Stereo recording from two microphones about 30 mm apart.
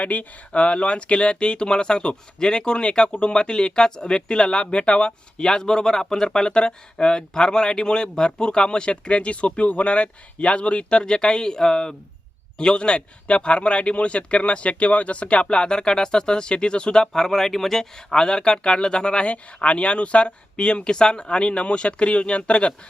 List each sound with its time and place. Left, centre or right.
0.0 s speech: left
5.5 s speech: left
17.1 s speech: centre
18.1 s speech: left